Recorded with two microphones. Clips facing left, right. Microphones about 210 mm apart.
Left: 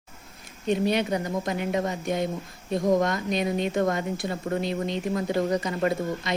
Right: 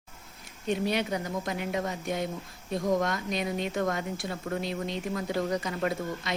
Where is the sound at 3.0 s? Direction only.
Centre (ahead or behind).